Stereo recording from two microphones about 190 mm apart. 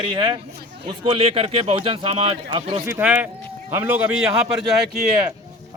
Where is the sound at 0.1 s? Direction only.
25° right (ahead or behind).